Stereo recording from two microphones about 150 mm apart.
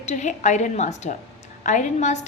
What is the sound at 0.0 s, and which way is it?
A woman's voice, 50° left (ahead or behind).